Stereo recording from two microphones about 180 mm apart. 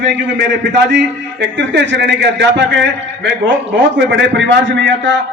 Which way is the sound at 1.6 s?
75° right (ahead or behind).